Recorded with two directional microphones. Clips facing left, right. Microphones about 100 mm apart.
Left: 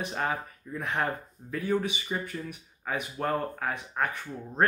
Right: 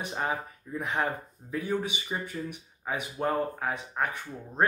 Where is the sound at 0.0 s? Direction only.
15° right (ahead or behind).